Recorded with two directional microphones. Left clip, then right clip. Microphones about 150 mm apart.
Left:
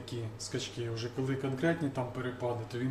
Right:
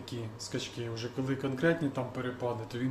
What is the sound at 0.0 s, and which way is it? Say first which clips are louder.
Speech: even; 15° right (ahead or behind).